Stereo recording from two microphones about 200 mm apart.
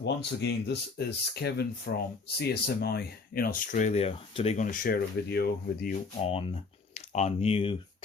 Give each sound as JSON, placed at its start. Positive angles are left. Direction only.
{"t": 0.0, "sound": "speech", "side_deg": 60}
{"t": 6.2, "sound": "speech", "side_deg": 30}